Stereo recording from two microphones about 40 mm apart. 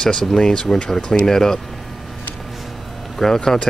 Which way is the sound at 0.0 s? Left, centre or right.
Centre.